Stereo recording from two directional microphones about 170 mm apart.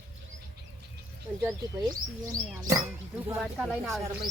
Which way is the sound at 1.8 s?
20° right (ahead or behind).